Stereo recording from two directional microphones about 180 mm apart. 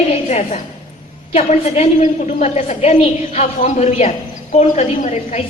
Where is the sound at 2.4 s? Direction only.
40° left (ahead or behind).